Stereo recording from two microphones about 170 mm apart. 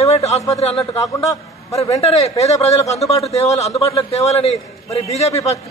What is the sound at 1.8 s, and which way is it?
A man's voice, 40° left (ahead or behind).